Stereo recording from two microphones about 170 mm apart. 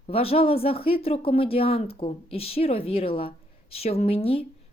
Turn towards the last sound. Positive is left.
turn(degrees=35)  # may be behind; listen again after turning